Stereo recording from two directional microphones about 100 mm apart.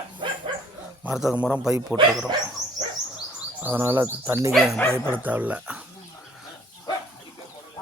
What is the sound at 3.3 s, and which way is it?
Speech, 20° right (ahead or behind).